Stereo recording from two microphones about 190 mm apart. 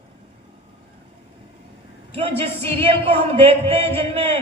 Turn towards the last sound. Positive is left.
turn(degrees=-35)  # may be behind; listen again after turning